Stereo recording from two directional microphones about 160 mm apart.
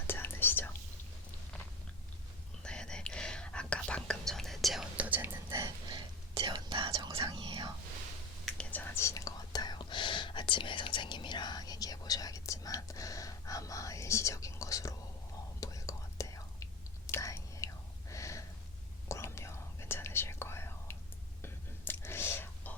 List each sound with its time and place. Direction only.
0.1 s whispering: 15° left (ahead or behind)
2.6 s whispering: 5° left (ahead or behind); by 5.4 s 10° right (ahead or behind)
5.5 s whispering: 25° right (ahead or behind)
8.5 s whispering: 10° left (ahead or behind)
18.1 s a sound: 20° left (ahead or behind)
19.0 s whispering: 15° left (ahead or behind)